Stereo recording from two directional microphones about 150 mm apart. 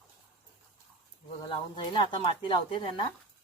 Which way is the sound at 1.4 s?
30° left (ahead or behind).